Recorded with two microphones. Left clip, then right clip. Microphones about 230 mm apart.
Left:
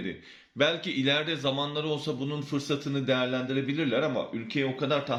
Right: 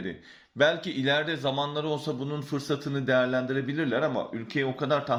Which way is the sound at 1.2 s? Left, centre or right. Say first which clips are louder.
Right 1 dB; centre.